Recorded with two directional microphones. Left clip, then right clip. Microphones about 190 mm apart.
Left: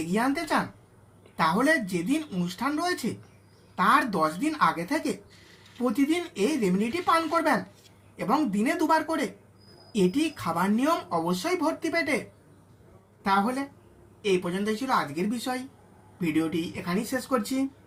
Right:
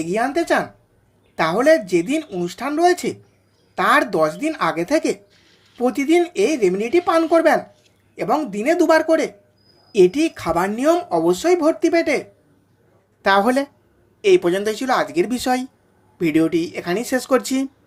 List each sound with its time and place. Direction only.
0.1 s speech: 35° right (ahead or behind)
13.2 s a woman's voice: 50° right (ahead or behind)